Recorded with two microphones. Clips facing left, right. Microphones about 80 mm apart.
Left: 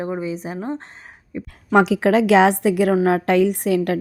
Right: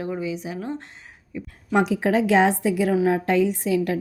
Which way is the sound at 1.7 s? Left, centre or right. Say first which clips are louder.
Left 5 dB; left.